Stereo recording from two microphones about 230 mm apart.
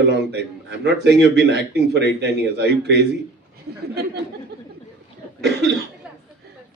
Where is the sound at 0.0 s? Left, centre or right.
Right.